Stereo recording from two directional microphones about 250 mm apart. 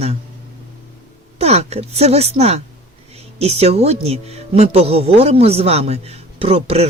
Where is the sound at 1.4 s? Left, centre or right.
Right.